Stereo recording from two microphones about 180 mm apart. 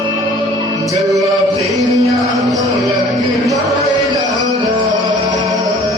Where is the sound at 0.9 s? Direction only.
20° right (ahead or behind).